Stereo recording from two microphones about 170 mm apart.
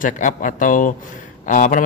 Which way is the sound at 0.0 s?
50° left (ahead or behind).